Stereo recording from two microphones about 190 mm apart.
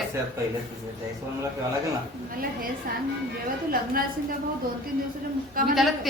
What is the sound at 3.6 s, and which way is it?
Speech, 50° right (ahead or behind).